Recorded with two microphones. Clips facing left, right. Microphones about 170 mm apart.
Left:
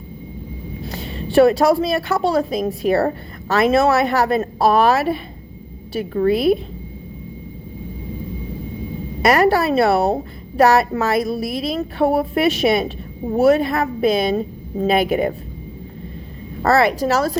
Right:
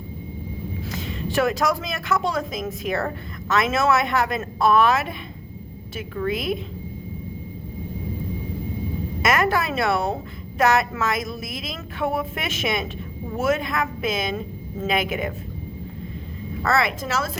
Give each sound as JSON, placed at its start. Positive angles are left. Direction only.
{"t": 0.9, "sound": "speech", "side_deg": 35}
{"t": 9.2, "sound": "speech", "side_deg": 35}
{"t": 16.6, "sound": "speech", "side_deg": 35}